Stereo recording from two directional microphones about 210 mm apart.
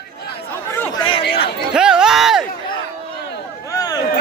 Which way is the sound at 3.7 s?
20° left (ahead or behind).